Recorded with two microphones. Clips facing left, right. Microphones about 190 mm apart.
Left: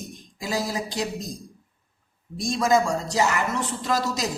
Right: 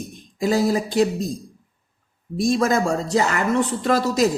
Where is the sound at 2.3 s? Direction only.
55° right (ahead or behind).